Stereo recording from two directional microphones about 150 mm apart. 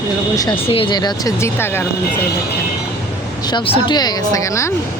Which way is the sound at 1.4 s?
15° left (ahead or behind).